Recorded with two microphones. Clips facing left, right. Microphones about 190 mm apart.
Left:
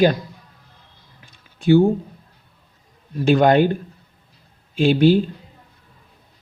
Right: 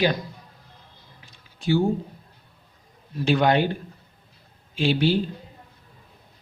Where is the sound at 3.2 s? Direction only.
45° left (ahead or behind).